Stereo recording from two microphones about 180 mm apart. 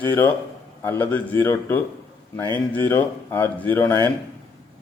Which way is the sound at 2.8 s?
10° left (ahead or behind).